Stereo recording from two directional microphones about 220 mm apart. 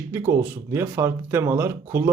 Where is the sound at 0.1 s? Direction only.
15° right (ahead or behind).